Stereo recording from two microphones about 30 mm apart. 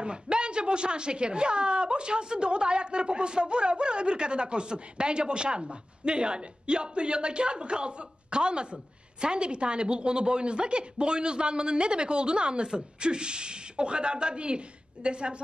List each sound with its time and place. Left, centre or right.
0.0 s a woman's voice: right